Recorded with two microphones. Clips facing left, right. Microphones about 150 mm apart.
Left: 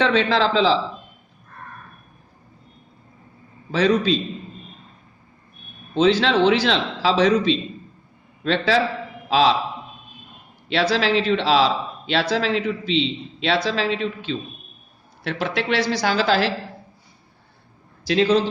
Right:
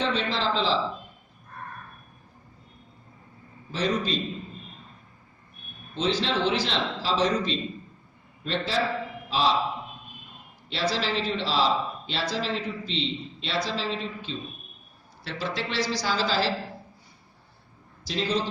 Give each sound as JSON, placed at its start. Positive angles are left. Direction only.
{"t": 0.0, "sound": "speech", "side_deg": 80}
{"t": 3.7, "sound": "a man's voice", "side_deg": 85}
{"t": 5.9, "sound": "a man's voice", "side_deg": 75}
{"t": 10.7, "sound": "a man's voice", "side_deg": 75}
{"t": 15.2, "sound": "a woman's voice", "side_deg": 60}
{"t": 18.0, "sound": "a man's voice", "side_deg": 70}